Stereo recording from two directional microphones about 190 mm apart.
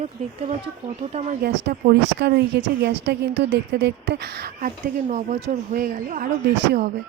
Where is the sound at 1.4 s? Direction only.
55° right (ahead or behind).